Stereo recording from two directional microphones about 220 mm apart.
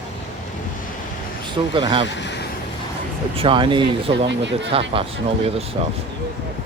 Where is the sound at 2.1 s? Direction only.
55° left (ahead or behind).